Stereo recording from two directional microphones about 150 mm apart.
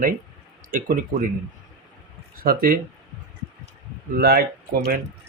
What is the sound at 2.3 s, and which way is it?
Speech, 80° right.